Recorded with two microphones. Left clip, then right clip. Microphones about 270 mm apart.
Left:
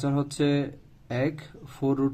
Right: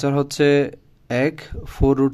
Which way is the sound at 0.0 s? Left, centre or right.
Right.